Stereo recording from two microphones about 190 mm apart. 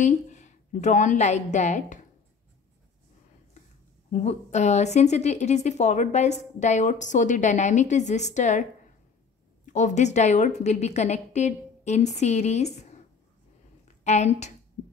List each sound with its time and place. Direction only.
0.0 s a woman's voice: 40° left (ahead or behind)
3.6 s a sound: 40° left (ahead or behind)
4.1 s a woman's voice: 35° left (ahead or behind)
9.7 s a woman's voice: 40° left (ahead or behind)